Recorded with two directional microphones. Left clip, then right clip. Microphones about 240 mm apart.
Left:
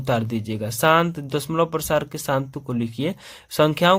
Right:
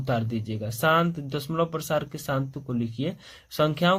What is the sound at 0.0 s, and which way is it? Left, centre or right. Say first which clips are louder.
Speech: left 5 dB; left.